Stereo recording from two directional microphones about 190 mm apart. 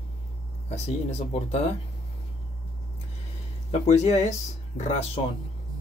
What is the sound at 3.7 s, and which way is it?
Speech, 35° left (ahead or behind).